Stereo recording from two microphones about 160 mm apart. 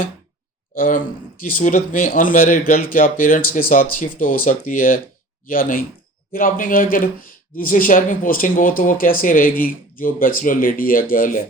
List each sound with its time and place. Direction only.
0.7 s speech: 55° left (ahead or behind)